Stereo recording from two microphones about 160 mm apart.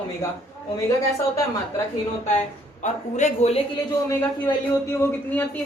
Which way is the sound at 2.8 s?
45° left (ahead or behind).